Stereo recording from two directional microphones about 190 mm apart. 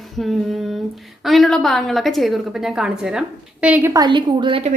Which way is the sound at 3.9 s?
20° right (ahead or behind).